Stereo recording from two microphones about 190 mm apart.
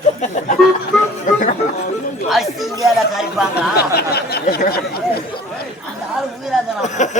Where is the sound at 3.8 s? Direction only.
55° left (ahead or behind).